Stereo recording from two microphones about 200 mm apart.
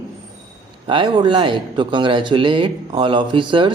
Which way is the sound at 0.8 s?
25° right (ahead or behind).